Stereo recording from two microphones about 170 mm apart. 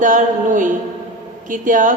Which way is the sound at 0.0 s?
50° right (ahead or behind).